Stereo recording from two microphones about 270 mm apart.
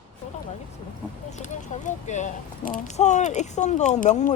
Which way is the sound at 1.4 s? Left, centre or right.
Left.